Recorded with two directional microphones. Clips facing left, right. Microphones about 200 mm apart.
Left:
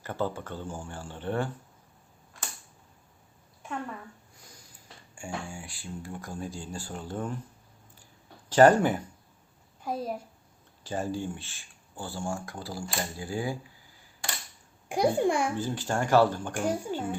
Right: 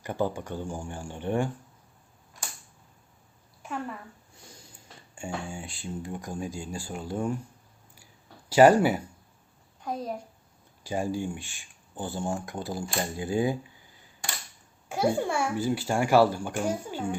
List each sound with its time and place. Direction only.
0.0 s speech: 15° right (ahead or behind)
5.1 s speech: 25° right (ahead or behind)
8.4 s speech: 10° right (ahead or behind)
9.8 s a child's voice: 5° left (ahead or behind)
10.8 s speech: 10° right (ahead or behind)
14.8 s a child's voice: 15° left (ahead or behind)
15.5 s speech: 10° right (ahead or behind)